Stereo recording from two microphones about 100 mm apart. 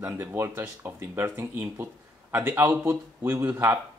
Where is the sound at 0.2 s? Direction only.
25° right (ahead or behind).